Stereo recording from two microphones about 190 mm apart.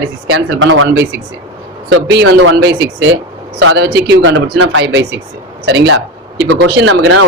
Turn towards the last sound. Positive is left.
turn(degrees=-85)